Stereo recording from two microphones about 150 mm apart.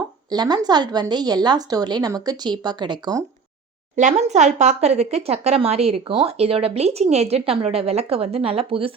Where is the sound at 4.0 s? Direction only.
50° right (ahead or behind).